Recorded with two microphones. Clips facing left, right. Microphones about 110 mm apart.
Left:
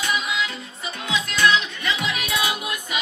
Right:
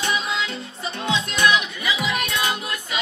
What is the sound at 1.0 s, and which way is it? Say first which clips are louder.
Music: even; 25° right (ahead or behind).